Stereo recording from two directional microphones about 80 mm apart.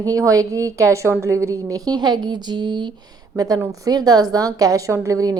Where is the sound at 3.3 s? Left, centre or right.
Right.